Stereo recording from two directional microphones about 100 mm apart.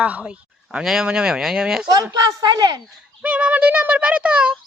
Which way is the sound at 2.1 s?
40° right (ahead or behind).